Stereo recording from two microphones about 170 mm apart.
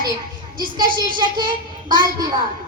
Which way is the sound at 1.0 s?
55° right (ahead or behind).